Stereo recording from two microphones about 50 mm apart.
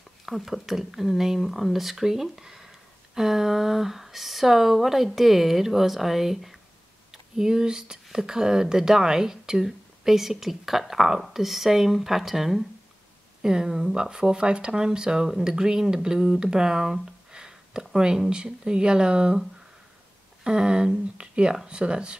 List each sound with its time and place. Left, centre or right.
0.2 s speech: centre
13.4 s speech: centre
20.4 s speech: centre